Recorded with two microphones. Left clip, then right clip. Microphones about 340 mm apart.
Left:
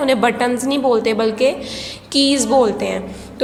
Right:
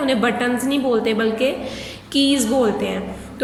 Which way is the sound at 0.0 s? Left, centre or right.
Centre.